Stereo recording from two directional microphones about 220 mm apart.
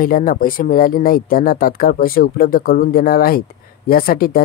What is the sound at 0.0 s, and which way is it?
Speech, 40° left (ahead or behind).